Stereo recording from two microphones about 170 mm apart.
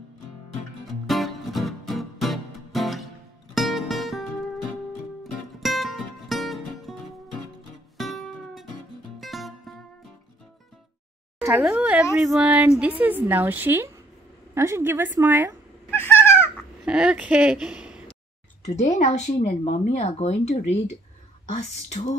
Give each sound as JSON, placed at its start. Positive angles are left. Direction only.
{"t": 1.0, "sound": "music", "side_deg": 0}
{"t": 8.0, "sound": "music", "side_deg": 0}
{"t": 11.4, "sound": "speech", "side_deg": -10}
{"t": 15.9, "sound": "a sound", "side_deg": 15}
{"t": 16.8, "sound": "speech", "side_deg": -5}
{"t": 18.6, "sound": "speech", "side_deg": 40}